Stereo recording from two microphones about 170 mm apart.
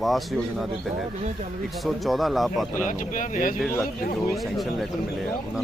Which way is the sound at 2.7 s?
50° left (ahead or behind).